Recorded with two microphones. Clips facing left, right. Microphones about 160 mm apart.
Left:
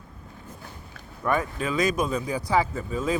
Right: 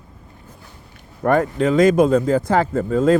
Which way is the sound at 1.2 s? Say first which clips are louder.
Right 9 dB; 60° right (ahead or behind).